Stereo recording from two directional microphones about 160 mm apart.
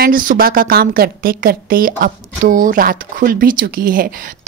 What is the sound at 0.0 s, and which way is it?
A woman's voice, 60° right (ahead or behind).